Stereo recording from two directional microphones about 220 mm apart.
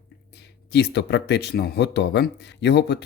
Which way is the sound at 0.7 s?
50° left (ahead or behind).